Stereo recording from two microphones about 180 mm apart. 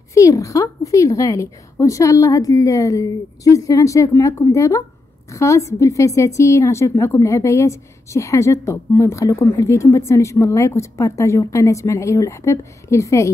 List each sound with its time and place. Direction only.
0.1 s a woman's voice: 15° left (ahead or behind)